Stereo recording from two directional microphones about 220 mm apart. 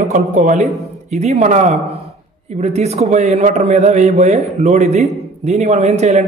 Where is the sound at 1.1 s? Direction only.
30° right (ahead or behind).